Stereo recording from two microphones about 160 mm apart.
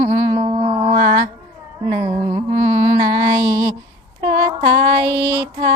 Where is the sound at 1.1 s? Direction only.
50° right (ahead or behind).